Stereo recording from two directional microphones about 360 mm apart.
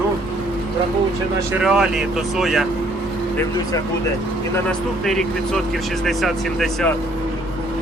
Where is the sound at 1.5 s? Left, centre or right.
Centre.